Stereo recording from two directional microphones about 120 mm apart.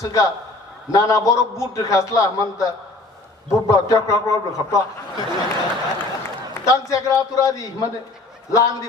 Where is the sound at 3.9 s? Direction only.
30° left (ahead or behind).